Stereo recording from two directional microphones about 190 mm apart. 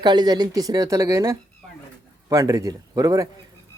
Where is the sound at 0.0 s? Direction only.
25° right (ahead or behind).